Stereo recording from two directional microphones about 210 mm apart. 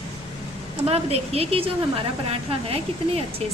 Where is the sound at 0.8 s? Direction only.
30° right (ahead or behind).